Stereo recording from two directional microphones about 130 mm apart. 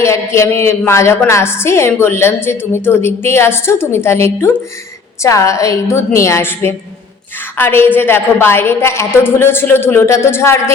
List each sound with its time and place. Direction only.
0.0 s a woman's voice: 20° left (ahead or behind)